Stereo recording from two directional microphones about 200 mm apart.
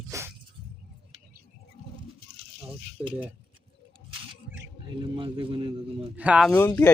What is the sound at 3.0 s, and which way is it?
Speech, 25° right (ahead or behind).